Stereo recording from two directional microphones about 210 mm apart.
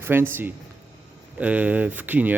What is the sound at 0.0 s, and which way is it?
Speech, 10° right (ahead or behind).